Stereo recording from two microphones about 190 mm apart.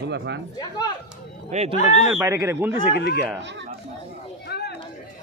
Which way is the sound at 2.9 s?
60° left (ahead or behind).